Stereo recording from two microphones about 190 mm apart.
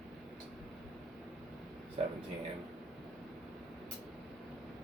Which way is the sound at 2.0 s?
35° right (ahead or behind).